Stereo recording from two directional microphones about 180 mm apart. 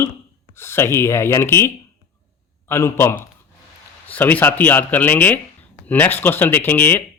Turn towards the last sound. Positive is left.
turn(degrees=10)  # may be behind; listen again after turning